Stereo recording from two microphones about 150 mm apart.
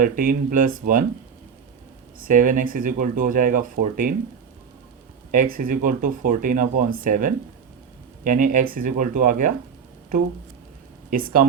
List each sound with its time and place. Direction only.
0.0 s speech: 65° right (ahead or behind)
2.1 s speech: 65° right (ahead or behind)
5.3 s speech: 65° right (ahead or behind)